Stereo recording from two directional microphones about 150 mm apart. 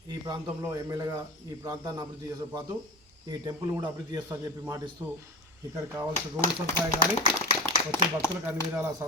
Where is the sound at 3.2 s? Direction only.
25° right (ahead or behind).